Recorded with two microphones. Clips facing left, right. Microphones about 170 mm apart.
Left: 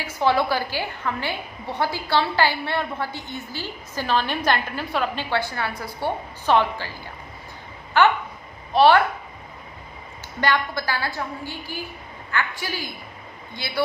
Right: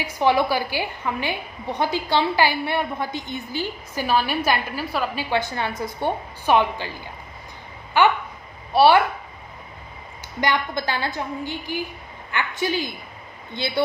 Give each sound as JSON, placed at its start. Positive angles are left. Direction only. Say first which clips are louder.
{"t": 0.0, "sound": "a woman's voice", "louder": "right 1 dB", "side_deg": -15}
{"t": 5.3, "sound": "a woman's voice", "louder": "right 1 dB", "side_deg": -20}
{"t": 7.9, "sound": "a woman's voice", "louder": "even", "side_deg": -10}
{"t": 10.4, "sound": "a woman's voice", "louder": "even", "side_deg": -20}